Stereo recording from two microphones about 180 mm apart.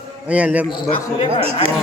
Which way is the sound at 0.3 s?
5° right (ahead or behind).